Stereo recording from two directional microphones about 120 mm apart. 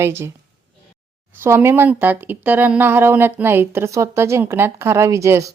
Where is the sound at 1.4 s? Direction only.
20° right (ahead or behind).